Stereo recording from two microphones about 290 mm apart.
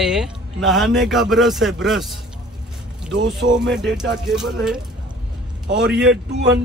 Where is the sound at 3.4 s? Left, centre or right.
Right.